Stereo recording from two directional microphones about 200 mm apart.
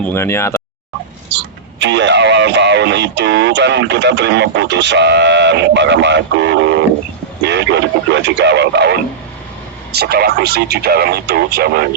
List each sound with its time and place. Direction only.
0.0 s speech: 10° left (ahead or behind)
1.8 s speech: 60° right (ahead or behind)
8.1 s speech: 60° right (ahead or behind)